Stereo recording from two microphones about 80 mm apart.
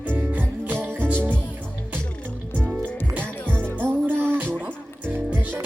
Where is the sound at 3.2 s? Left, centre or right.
Right.